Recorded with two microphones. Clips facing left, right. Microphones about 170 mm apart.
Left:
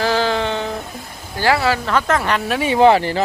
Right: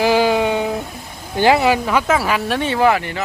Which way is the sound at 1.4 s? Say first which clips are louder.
Right 3 dB; 20° right (ahead or behind).